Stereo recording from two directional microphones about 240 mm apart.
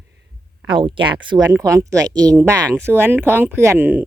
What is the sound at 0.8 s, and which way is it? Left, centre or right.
Speech, centre.